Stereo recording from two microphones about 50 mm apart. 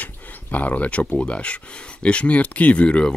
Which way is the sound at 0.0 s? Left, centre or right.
Left.